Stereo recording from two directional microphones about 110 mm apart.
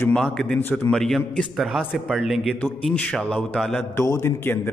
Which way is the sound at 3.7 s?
25° left (ahead or behind).